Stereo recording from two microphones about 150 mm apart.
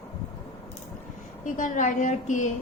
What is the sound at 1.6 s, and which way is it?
Speech, 55° left (ahead or behind).